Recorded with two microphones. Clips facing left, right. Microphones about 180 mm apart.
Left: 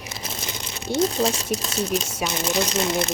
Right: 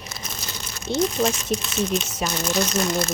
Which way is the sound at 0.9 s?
10° left (ahead or behind).